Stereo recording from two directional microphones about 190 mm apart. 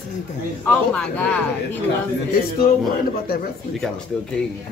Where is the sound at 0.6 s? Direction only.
5° left (ahead or behind).